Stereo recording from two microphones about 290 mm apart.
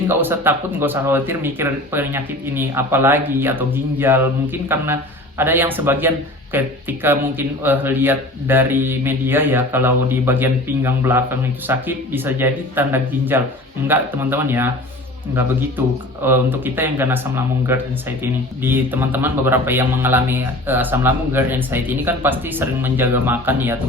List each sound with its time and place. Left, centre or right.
0.1 s speech: centre
16.2 s speech: centre